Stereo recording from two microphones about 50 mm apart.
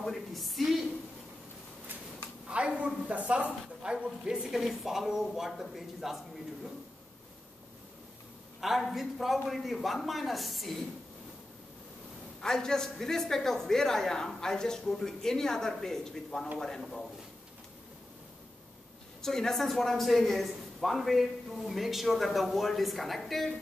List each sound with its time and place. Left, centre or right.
0.0 s a sound: centre
2.4 s a sound: right
3.1 s speech: right
4.2 s a man's voice: centre
8.5 s a man's voice: centre
12.4 s a man's voice: centre
19.2 s a man's voice: centre